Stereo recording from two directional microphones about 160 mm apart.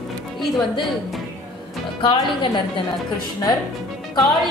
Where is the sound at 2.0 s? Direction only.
30° left (ahead or behind).